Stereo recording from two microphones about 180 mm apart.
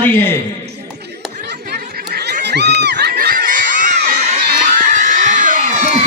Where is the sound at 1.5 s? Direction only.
65° right (ahead or behind).